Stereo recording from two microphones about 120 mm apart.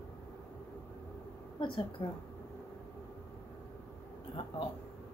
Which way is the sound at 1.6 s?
40° left (ahead or behind).